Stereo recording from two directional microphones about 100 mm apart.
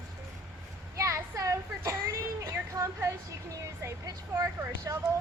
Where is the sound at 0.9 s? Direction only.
30° right (ahead or behind).